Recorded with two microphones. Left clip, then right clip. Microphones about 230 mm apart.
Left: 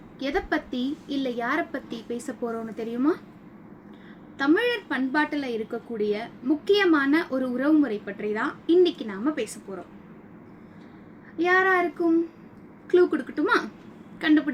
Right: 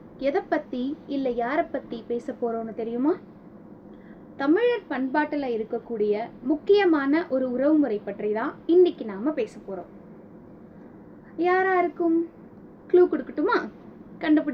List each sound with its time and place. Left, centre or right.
0.2 s a woman's voice: left
4.4 s a woman's voice: left
11.3 s a woman's voice: left
12.9 s a woman's voice: left